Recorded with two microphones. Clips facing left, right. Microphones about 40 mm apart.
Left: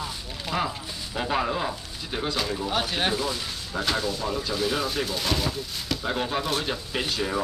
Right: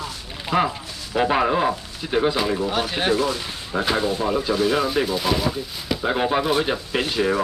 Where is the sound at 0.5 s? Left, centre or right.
Centre.